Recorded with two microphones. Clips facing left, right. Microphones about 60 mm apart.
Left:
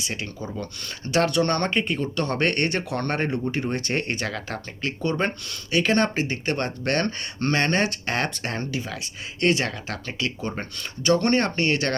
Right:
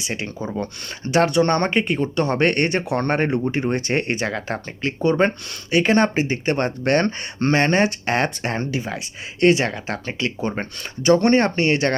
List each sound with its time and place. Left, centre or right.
0.0 s speech: right
1.0 s speech: centre
10.5 s speech: right